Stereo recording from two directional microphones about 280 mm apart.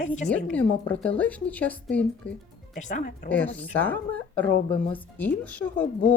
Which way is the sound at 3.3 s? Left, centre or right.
Centre.